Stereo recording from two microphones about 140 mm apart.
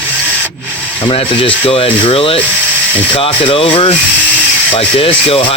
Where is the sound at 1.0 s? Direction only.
40° left (ahead or behind).